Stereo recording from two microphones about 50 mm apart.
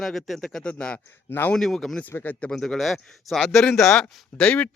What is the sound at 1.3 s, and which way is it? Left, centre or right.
Speech, left.